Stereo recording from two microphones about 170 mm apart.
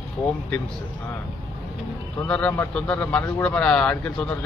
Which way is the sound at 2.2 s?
5° left (ahead or behind).